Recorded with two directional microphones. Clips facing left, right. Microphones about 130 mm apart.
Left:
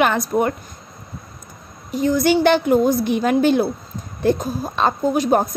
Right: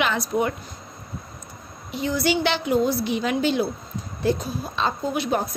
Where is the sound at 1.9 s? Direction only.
45° left (ahead or behind).